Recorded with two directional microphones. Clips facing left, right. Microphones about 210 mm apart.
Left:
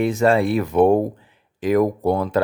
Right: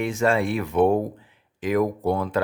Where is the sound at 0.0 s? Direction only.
35° left (ahead or behind).